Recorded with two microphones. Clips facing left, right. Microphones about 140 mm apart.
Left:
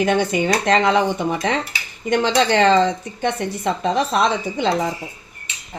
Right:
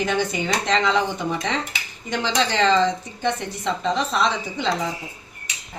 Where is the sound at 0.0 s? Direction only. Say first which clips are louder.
Left 5 dB; 55° left (ahead or behind).